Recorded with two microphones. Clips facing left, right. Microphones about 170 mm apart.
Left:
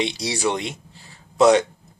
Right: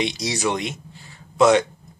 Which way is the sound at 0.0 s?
30° left (ahead or behind).